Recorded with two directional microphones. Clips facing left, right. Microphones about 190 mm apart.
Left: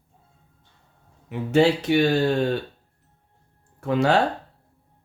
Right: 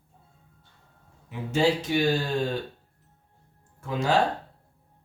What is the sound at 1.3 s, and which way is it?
Speech, 65° left (ahead or behind).